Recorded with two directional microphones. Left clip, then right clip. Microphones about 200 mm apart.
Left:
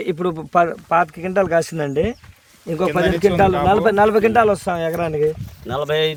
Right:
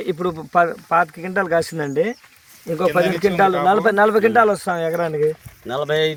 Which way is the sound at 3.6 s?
20° left (ahead or behind).